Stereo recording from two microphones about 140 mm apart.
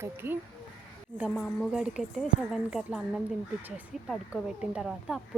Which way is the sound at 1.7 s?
Centre (ahead or behind).